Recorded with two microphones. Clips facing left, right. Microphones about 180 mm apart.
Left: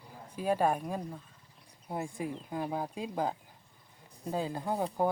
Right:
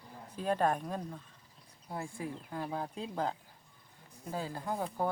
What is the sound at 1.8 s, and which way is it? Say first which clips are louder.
Speech: left 4 dB; 20° left (ahead or behind).